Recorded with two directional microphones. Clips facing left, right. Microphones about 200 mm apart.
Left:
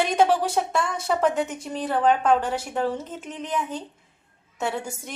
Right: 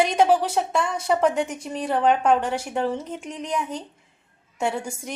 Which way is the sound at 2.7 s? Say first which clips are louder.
Right 1 dB; 5° left (ahead or behind).